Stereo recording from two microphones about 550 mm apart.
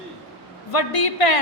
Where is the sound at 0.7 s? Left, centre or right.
Left.